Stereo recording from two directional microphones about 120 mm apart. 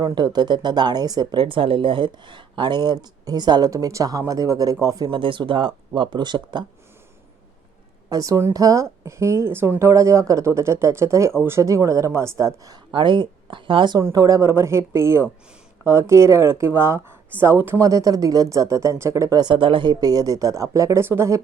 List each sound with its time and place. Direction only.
0.0 s speech: 35° right (ahead or behind)
5.2 s speech: 45° right (ahead or behind)
8.1 s speech: 30° right (ahead or behind)
12.9 s a woman's voice: 45° right (ahead or behind)
14.1 s speech: 30° right (ahead or behind)